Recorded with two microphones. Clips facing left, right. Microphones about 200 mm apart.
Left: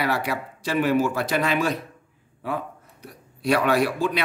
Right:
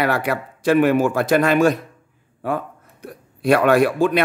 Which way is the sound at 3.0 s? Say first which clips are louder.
Right 5 dB; 50° right (ahead or behind).